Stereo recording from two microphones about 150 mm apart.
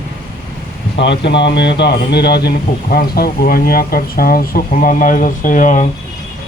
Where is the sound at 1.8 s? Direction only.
90° left.